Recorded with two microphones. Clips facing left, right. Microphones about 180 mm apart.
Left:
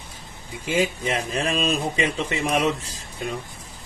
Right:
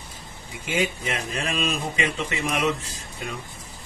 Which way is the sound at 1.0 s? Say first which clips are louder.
Left 4 dB; 35° left (ahead or behind).